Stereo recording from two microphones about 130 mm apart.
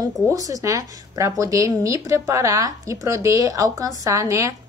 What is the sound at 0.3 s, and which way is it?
Speech, 25° right (ahead or behind).